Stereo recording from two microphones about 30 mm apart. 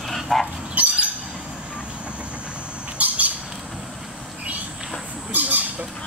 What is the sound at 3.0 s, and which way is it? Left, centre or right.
Squawk, right.